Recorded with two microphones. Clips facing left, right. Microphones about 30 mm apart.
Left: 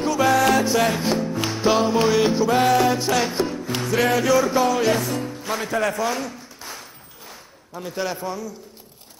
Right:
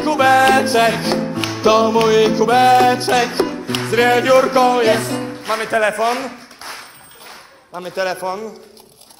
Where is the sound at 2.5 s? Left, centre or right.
Right.